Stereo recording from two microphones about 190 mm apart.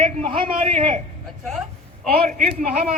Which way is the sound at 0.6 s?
30° right (ahead or behind).